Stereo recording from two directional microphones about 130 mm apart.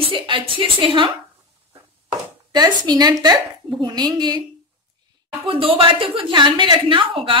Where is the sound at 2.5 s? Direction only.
30° right (ahead or behind).